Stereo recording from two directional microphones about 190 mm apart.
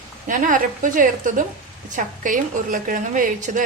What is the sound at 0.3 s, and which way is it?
A woman's voice, 45° right (ahead or behind).